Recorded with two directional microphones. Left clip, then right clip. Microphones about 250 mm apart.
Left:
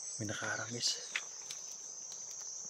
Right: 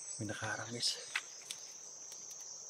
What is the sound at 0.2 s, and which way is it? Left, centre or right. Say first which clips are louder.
Speech: left 2 dB; centre.